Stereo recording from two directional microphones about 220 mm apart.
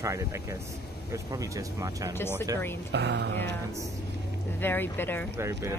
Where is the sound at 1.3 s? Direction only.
15° right (ahead or behind).